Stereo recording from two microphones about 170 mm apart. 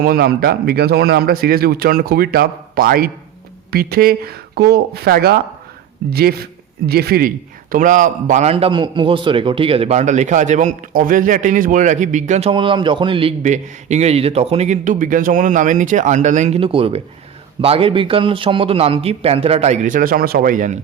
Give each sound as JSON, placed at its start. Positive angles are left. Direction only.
{"t": 0.0, "sound": "speech", "side_deg": -60}
{"t": 12.5, "sound": "a man's voice", "side_deg": -30}
{"t": 13.4, "sound": "a man's voice", "side_deg": -45}